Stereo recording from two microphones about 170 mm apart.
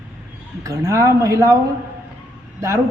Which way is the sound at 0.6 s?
20° right (ahead or behind).